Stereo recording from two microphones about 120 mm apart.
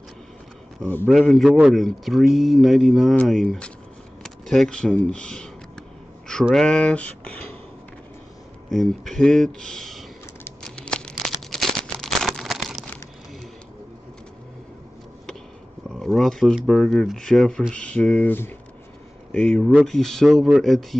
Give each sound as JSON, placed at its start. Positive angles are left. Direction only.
{"t": 1.0, "sound": "speech", "side_deg": 0}
{"t": 8.6, "sound": "speech", "side_deg": 0}
{"t": 10.6, "sound": "a sound", "side_deg": 5}
{"t": 15.9, "sound": "speech", "side_deg": 5}